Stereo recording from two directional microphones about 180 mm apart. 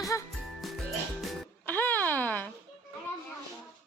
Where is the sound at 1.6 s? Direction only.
10° left (ahead or behind).